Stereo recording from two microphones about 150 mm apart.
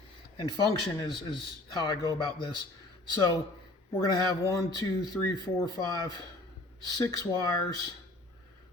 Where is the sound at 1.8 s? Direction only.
30° left (ahead or behind).